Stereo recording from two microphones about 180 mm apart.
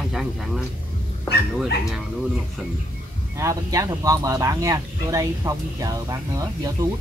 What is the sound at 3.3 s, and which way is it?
Speech, 15° right (ahead or behind).